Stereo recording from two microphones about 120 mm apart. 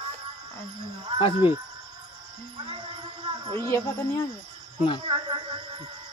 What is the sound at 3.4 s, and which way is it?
Speech, 40° right (ahead or behind).